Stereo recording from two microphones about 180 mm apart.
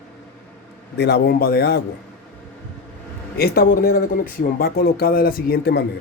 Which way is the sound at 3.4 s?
55° left (ahead or behind).